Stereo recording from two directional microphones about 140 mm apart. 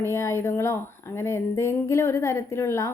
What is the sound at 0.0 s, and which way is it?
A woman's voice, 20° left (ahead or behind).